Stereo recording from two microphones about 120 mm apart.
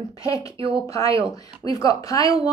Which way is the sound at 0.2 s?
30° left (ahead or behind).